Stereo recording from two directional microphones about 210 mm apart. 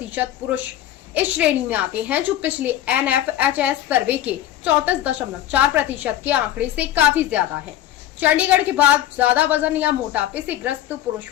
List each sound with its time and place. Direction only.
0.1 s a woman's voice: 10° right (ahead or behind)